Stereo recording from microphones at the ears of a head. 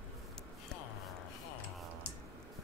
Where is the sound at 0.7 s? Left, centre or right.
Left.